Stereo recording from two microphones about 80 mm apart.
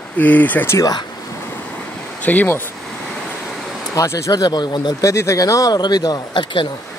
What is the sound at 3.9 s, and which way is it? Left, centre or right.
Speech, left.